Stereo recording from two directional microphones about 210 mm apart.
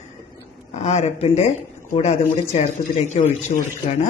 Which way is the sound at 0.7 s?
35° left (ahead or behind).